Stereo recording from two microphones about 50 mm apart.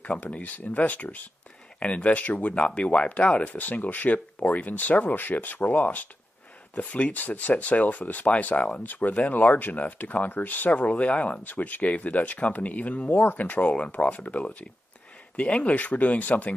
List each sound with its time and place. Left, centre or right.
0.0 s speech: left